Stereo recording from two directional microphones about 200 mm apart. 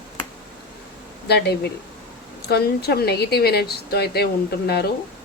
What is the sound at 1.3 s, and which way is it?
A woman's voice, 55° left (ahead or behind).